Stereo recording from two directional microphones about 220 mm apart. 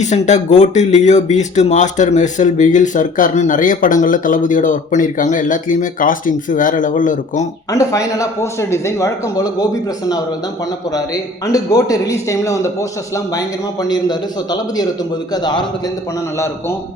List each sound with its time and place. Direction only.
0.0 s speech: 30° left (ahead or behind)
7.7 s a man's voice: 15° left (ahead or behind)
10.9 s a man's voice: 15° left (ahead or behind)
13.8 s a man's voice: 20° left (ahead or behind)